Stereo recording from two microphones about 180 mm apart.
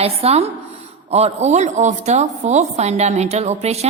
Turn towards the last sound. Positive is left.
turn(degrees=-35)  # may be behind; listen again after turning